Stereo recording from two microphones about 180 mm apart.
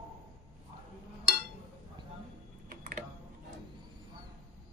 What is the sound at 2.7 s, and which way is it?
Typing, 50° right (ahead or behind).